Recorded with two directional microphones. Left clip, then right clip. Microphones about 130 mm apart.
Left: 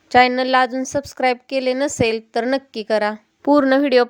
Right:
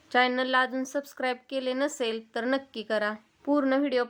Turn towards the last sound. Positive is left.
turn(degrees=70)  # may be behind; listen again after turning